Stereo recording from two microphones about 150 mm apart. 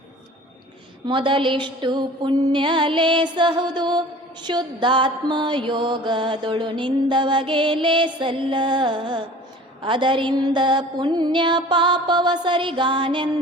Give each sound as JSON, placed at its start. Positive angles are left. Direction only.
{"t": 1.0, "sound": "mantra", "side_deg": -35}